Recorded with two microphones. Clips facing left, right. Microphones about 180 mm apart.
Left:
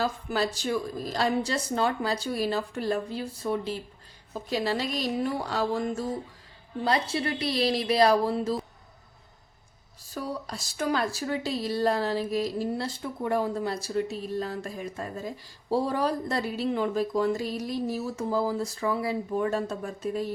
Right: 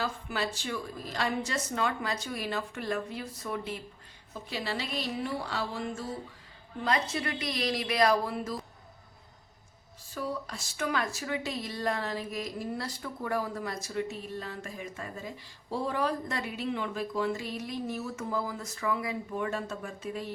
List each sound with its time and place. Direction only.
0.0 s speech: 40° left (ahead or behind)
10.1 s speech: 40° left (ahead or behind)